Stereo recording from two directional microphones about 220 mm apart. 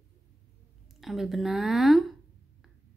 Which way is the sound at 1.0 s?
Centre (ahead or behind).